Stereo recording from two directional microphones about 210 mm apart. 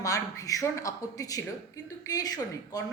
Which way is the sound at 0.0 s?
15° left (ahead or behind).